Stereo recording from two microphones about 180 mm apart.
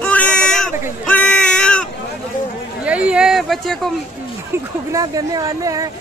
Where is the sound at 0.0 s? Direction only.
5° left (ahead or behind).